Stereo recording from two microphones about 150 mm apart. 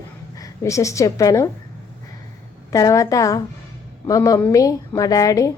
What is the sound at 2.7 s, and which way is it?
A woman's voice, 20° left (ahead or behind).